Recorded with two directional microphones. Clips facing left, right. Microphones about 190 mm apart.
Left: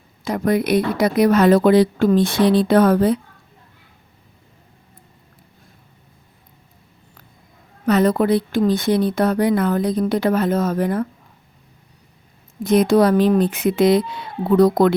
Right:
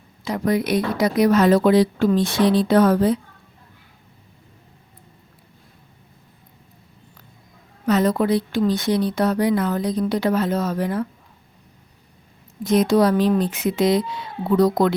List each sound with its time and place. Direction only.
0.3 s a woman's voice: 55° left (ahead or behind)
7.9 s a woman's voice: 60° left (ahead or behind)
12.6 s a woman's voice: 55° left (ahead or behind)